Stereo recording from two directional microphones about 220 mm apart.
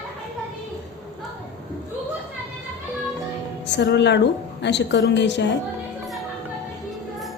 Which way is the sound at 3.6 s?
50° left (ahead or behind).